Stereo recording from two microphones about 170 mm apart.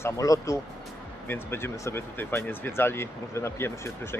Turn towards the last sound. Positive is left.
turn(degrees=15)  # may be behind; listen again after turning